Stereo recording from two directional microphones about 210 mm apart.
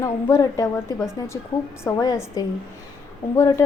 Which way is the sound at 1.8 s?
15° left (ahead or behind).